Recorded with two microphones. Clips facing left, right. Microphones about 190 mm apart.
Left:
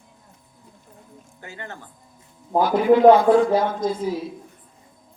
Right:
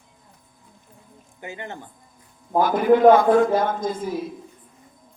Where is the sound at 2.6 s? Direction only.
50° right (ahead or behind).